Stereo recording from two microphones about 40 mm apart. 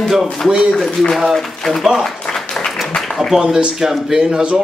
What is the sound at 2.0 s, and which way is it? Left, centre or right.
Applause, centre.